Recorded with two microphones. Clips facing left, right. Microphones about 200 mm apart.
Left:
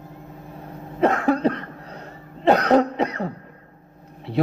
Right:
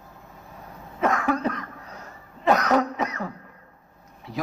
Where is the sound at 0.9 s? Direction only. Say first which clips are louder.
Left 4 dB; 30° left (ahead or behind).